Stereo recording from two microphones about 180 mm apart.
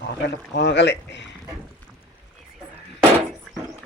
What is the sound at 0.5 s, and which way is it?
Speech, 70° left (ahead or behind).